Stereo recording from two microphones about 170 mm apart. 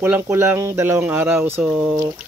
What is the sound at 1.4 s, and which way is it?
Speech, 40° right (ahead or behind).